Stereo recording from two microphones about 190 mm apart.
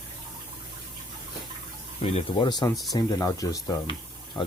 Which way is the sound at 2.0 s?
30° left (ahead or behind).